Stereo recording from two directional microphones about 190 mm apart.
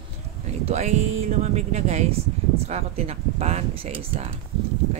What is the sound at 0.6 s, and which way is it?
Speech, 35° right (ahead or behind).